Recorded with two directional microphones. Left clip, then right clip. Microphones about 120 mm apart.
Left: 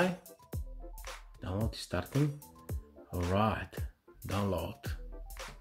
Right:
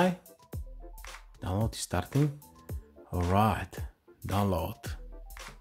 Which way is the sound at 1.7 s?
40° right (ahead or behind).